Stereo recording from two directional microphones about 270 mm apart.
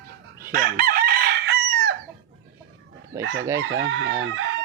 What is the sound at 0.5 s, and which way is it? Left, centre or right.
Chicken, right.